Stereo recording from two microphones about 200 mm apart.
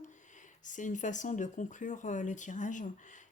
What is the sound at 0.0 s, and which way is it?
Speech, 40° left (ahead or behind).